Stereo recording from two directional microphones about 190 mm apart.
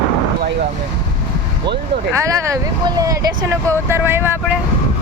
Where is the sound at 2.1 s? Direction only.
15° right (ahead or behind).